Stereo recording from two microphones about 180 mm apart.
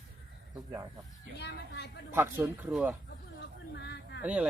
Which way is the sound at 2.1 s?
10° right (ahead or behind).